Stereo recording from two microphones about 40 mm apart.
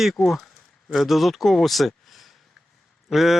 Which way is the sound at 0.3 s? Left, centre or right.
Centre.